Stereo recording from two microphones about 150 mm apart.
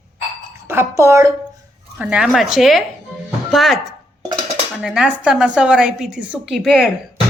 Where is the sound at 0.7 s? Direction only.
15° right (ahead or behind).